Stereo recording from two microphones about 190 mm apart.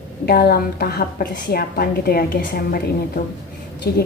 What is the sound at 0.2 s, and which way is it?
A woman's voice, 55° left (ahead or behind).